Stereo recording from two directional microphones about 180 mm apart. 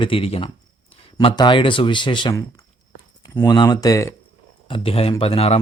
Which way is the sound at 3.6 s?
20° left (ahead or behind).